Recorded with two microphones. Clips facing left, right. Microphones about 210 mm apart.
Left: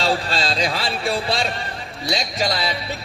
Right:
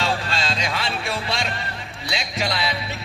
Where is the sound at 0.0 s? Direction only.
35° left (ahead or behind).